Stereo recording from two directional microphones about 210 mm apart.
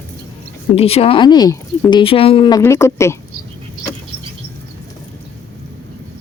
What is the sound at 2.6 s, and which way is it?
Speech, 15° left (ahead or behind).